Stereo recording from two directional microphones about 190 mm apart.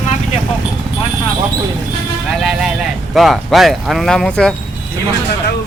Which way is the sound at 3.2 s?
Centre (ahead or behind).